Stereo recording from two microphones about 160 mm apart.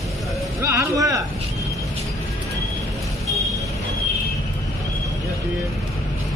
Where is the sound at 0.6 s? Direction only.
20° right (ahead or behind).